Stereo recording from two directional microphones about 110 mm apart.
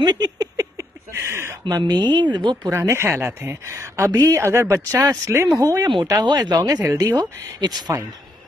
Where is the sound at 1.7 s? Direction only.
40° right (ahead or behind).